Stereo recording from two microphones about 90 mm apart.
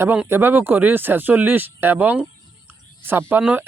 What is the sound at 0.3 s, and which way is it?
Speech, 20° right (ahead or behind).